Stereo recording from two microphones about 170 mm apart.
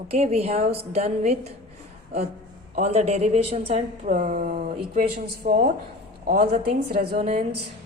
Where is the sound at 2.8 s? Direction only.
40° right (ahead or behind).